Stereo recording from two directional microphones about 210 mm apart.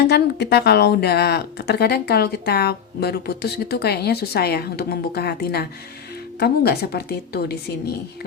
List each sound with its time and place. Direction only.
0.1 s speech: 50° left (ahead or behind)